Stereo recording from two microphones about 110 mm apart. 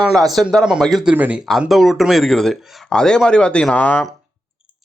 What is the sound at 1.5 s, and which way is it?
Speech, centre (ahead or behind).